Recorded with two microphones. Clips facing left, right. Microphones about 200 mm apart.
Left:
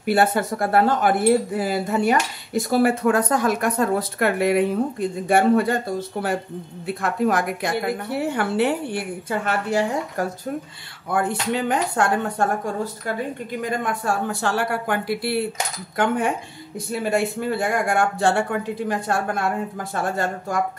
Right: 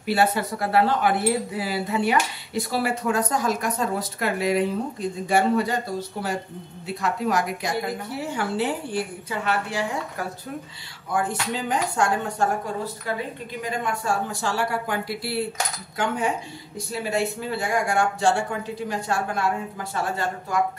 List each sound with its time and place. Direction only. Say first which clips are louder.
0.0 s a woman's voice: left 3 dB; 50° left (ahead or behind)
11.1 s a woman's voice: left 3 dB; 60° left (ahead or behind)
13.6 s a woman's voice: left 2 dB; 55° left (ahead or behind)